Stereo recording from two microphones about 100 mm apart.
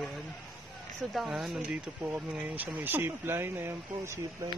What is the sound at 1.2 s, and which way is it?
Speech, centre (ahead or behind).